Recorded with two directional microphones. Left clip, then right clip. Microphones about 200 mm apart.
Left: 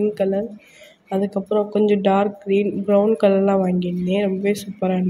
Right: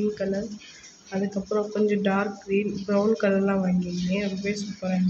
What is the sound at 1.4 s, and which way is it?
Speech, 35° left (ahead or behind).